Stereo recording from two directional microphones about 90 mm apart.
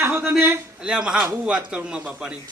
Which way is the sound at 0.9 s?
10° right (ahead or behind).